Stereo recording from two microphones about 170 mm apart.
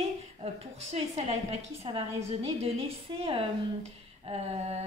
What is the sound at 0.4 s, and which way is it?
A woman's voice, 35° right (ahead or behind).